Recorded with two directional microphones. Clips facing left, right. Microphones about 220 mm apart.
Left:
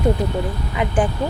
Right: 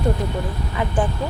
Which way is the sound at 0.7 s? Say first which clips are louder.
Left 3 dB; 15° left (ahead or behind).